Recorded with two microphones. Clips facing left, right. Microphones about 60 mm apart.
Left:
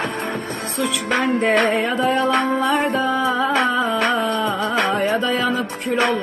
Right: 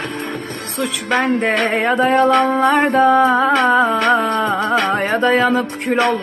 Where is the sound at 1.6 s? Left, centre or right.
Right.